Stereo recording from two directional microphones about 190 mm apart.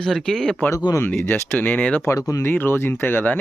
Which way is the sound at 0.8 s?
20° left (ahead or behind).